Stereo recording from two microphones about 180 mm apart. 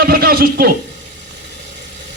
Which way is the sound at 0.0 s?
55° right (ahead or behind).